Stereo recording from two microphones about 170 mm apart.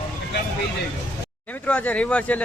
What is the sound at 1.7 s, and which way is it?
Speech, 10° left (ahead or behind).